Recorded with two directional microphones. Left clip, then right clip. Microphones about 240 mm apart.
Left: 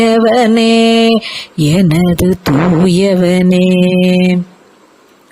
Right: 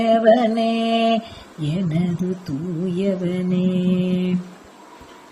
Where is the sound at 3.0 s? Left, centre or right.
Left.